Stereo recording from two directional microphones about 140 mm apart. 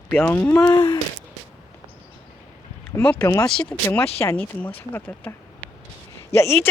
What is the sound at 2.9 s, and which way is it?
Speech, 15° left (ahead or behind).